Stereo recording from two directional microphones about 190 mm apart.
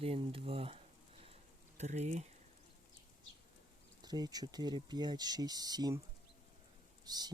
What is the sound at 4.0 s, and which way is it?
Speech, 20° right (ahead or behind).